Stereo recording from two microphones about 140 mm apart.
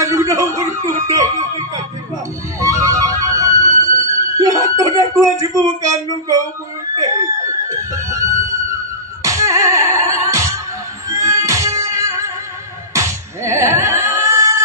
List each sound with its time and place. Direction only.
0.0 s music: 20° right (ahead or behind)
2.6 s music: 25° right (ahead or behind)
4.0 s a sound: 25° right (ahead or behind)
7.0 s music: 25° right (ahead or behind)
9.2 s music: 20° right (ahead or behind)
12.9 s slap: 20° right (ahead or behind)